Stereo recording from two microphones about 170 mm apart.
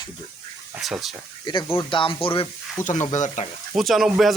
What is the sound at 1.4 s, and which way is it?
Speech, 25° left (ahead or behind).